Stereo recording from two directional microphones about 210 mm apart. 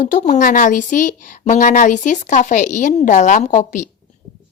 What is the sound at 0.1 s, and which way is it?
A woman's voice, 35° left (ahead or behind).